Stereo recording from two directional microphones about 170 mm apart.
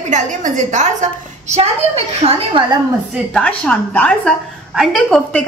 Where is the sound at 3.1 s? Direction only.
5° left (ahead or behind).